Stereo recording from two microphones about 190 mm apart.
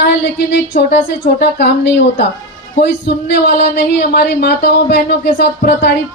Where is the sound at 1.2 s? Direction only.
40° left (ahead or behind).